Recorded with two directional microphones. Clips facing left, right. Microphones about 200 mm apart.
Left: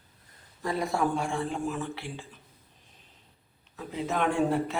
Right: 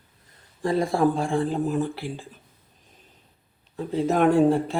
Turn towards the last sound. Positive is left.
turn(degrees=-35)  # may be behind; listen again after turning